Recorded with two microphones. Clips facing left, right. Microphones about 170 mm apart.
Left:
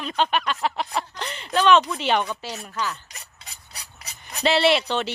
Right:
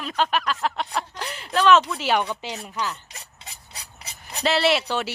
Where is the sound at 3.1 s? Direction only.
25° right (ahead or behind).